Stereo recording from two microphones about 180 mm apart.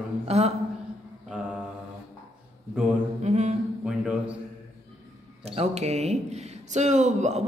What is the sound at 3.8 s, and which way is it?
Speech, 5° right (ahead or behind).